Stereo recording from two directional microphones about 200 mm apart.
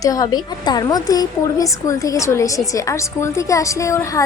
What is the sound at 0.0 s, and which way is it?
A woman's voice, 20° left (ahead or behind).